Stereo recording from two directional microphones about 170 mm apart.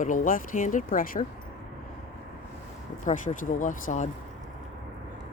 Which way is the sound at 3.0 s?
50° left (ahead or behind).